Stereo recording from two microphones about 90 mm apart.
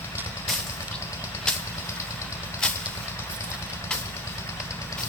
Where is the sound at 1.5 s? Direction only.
10° left (ahead or behind).